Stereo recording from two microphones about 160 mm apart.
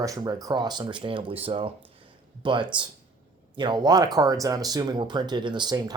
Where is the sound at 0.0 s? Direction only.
25° right (ahead or behind).